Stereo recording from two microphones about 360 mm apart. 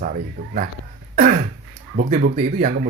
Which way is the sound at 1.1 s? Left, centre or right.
Right.